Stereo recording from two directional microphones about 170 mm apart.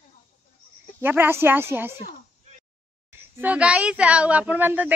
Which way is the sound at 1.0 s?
10° right (ahead or behind).